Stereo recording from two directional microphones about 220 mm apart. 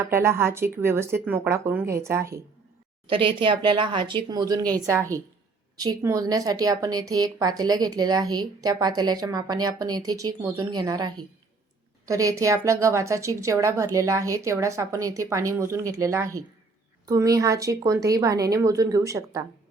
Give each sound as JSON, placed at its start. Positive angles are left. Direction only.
{"t": 0.0, "sound": "a woman's voice", "side_deg": -10}
{"t": 3.1, "sound": "a woman's voice", "side_deg": -25}